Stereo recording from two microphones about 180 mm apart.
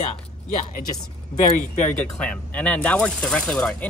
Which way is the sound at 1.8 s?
5° left (ahead or behind).